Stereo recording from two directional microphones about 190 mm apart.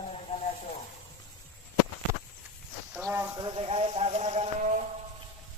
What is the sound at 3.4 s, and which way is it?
Speech, 25° right (ahead or behind).